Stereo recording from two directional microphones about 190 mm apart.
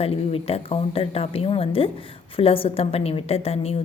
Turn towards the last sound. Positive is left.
turn(degrees=30)  # may be behind; listen again after turning